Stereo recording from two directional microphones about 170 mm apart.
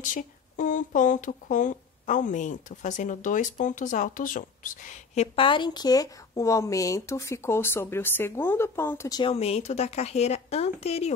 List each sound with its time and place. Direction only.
0.0 s speech: 50° left (ahead or behind); by 9.2 s 15° left (ahead or behind)
9.2 s speech: 35° left (ahead or behind)